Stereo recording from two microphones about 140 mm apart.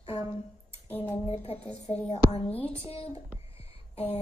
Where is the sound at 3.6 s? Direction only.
45° left (ahead or behind).